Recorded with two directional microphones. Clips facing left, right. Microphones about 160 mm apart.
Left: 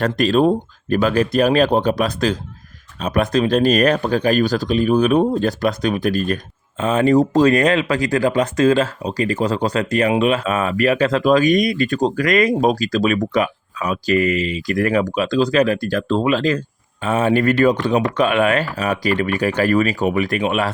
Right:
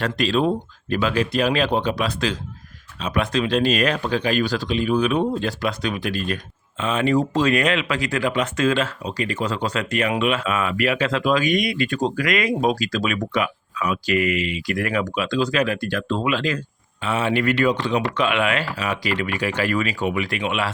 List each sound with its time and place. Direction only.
0.0 s speech: 45° left (ahead or behind)